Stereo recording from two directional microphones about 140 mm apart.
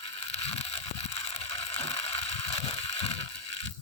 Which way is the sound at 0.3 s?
50° left (ahead or behind).